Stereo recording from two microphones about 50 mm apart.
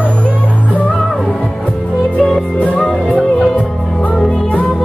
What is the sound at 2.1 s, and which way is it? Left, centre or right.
Music, centre.